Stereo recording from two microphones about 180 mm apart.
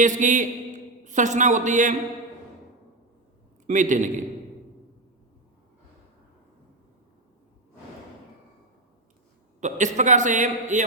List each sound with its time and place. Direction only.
0.0 s a man's voice: 45° right (ahead or behind)
3.7 s a man's voice: 45° right (ahead or behind)
9.6 s a man's voice: 40° right (ahead or behind)